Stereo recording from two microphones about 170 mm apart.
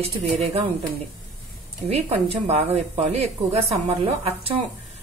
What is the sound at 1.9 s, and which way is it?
A woman's voice, 35° right (ahead or behind).